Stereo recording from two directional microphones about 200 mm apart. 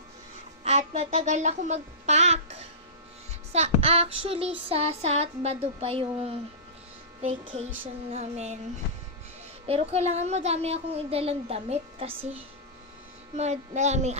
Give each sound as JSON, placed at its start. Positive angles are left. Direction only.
{"t": 0.6, "sound": "a woman's voice", "side_deg": -35}
{"t": 8.1, "sound": "a woman's voice", "side_deg": -35}
{"t": 9.6, "sound": "a woman's voice", "side_deg": -30}
{"t": 13.3, "sound": "a woman's voice", "side_deg": -35}